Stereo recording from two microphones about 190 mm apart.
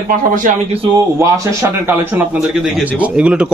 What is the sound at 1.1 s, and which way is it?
Speech, 15° right (ahead or behind).